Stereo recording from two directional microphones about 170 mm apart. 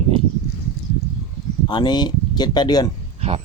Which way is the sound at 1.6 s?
25° left (ahead or behind).